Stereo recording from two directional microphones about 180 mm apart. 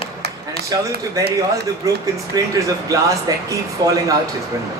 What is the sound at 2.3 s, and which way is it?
Speech, 20° right (ahead or behind).